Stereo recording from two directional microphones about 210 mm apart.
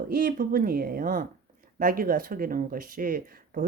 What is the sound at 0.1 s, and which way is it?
Speech, 40° right (ahead or behind).